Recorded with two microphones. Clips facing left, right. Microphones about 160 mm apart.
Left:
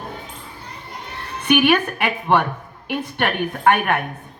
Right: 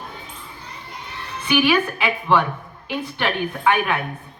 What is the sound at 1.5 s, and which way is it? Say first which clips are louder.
A woman's voice: left 2 dB; 60° left (ahead or behind).